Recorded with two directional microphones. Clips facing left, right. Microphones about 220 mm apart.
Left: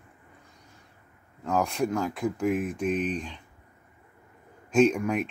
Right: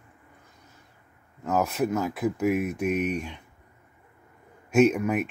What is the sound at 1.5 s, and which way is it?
Speech, 5° right (ahead or behind).